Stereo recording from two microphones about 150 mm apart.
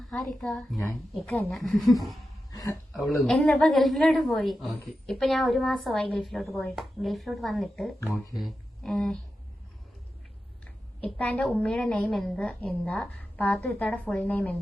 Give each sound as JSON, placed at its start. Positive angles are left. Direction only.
{"t": 0.1, "sound": "a woman's voice", "side_deg": 0}
{"t": 2.5, "sound": "a sound", "side_deg": 25}
{"t": 2.9, "sound": "a woman's voice", "side_deg": 0}
{"t": 11.0, "sound": "a woman's voice", "side_deg": 10}